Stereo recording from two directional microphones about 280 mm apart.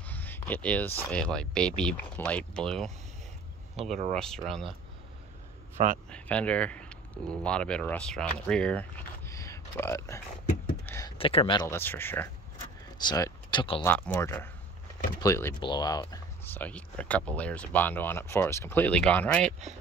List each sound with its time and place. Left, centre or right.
0.0 s speech: centre
3.9 s speech: right
4.5 s speech: centre
6.0 s speech: centre